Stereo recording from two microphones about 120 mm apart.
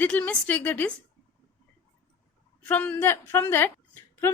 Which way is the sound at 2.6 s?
15° left (ahead or behind).